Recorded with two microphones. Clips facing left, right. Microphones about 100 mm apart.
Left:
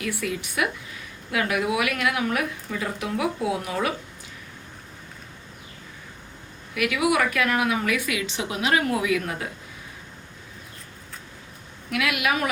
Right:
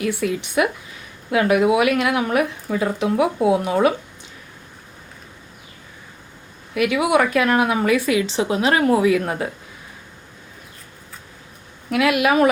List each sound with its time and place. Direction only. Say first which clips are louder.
0.0 s speech: right 7 dB; 25° right (ahead or behind)
6.7 s a woman's voice: right 5 dB; 25° right (ahead or behind)
11.9 s speech: right 7 dB; 30° right (ahead or behind)